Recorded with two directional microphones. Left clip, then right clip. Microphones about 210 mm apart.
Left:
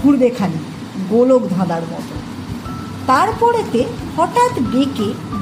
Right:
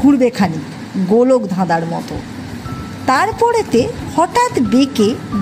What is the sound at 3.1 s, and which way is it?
Speech, 45° right (ahead or behind).